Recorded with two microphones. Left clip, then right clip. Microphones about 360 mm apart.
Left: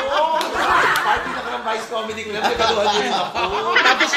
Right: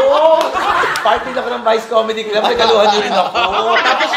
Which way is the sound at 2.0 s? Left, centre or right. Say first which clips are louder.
Right 11 dB; right.